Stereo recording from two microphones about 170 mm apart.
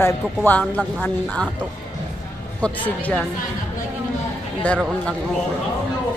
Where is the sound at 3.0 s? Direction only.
10° left (ahead or behind).